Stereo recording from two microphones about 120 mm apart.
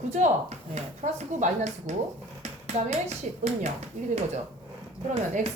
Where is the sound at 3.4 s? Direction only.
75° right (ahead or behind).